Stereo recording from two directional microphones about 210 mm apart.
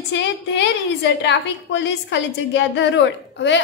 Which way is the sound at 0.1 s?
55° left (ahead or behind).